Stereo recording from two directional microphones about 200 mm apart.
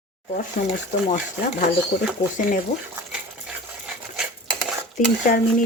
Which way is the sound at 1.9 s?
45° left (ahead or behind).